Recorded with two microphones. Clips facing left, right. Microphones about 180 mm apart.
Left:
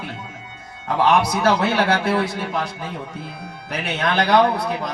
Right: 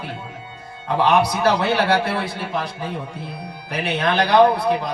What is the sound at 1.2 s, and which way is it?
Speech, 45° left (ahead or behind).